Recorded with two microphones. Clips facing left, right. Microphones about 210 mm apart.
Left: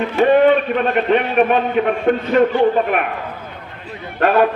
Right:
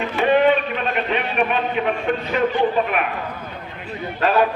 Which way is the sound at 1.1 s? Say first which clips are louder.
Left 8 dB; 45° left (ahead or behind).